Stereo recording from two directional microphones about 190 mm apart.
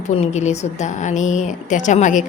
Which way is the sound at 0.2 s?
35° left (ahead or behind).